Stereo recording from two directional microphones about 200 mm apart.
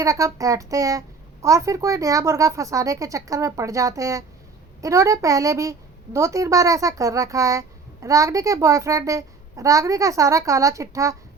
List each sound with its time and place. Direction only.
0.0 s a woman's voice: 15° right (ahead or behind)